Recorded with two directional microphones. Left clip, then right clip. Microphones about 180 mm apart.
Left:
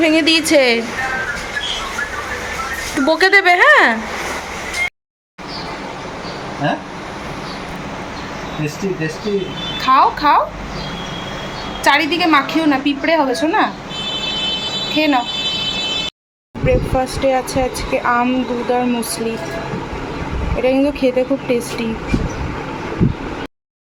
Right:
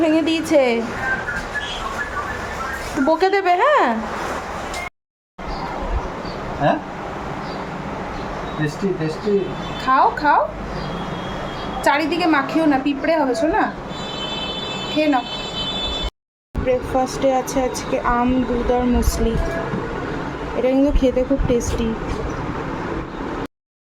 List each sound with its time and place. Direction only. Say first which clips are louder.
0.0 s speech: left 5 dB; centre (ahead or behind)
3.1 s speech: left 5 dB; 5° right (ahead or behind)
6.6 s speech: right 1 dB; 20° left (ahead or behind)
9.8 s speech: left 3 dB; 10° right (ahead or behind)
11.8 s speech: left 4 dB; 10° right (ahead or behind)
14.9 s speech: left 3 dB; 5° left (ahead or behind)
16.6 s speech: left 2 dB; centre (ahead or behind)
20.6 s speech: left 2 dB; centre (ahead or behind)